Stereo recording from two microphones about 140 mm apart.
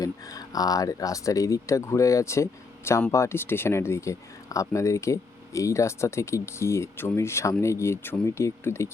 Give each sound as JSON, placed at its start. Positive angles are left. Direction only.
{"t": 0.0, "sound": "speech", "side_deg": 25}